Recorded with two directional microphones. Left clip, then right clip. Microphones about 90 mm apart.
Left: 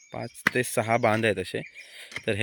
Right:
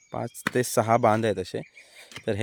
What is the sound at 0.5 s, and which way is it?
Speech, 40° right (ahead or behind).